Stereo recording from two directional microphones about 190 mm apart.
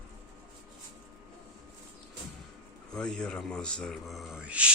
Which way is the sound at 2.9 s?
5° left (ahead or behind).